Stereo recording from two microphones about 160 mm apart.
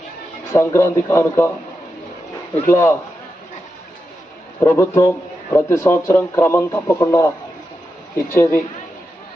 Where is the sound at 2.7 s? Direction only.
15° left (ahead or behind).